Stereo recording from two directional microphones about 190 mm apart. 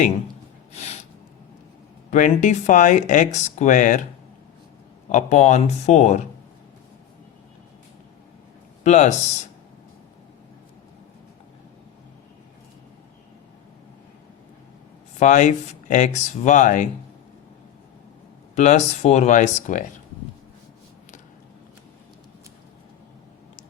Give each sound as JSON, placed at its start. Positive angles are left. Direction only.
{"t": 0.7, "sound": "snort", "side_deg": 35}
{"t": 2.0, "sound": "speech", "side_deg": 40}
{"t": 5.0, "sound": "speech", "side_deg": 40}
{"t": 8.8, "sound": "speech", "side_deg": 40}
{"t": 15.2, "sound": "speech", "side_deg": 40}
{"t": 18.5, "sound": "speech", "side_deg": 35}